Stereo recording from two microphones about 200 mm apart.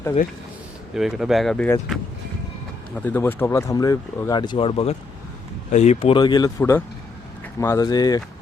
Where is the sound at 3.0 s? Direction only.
10° left (ahead or behind).